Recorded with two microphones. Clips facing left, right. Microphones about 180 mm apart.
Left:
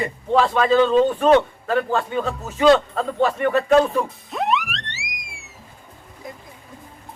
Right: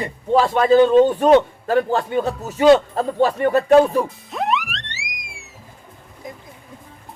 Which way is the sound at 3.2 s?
30° right (ahead or behind).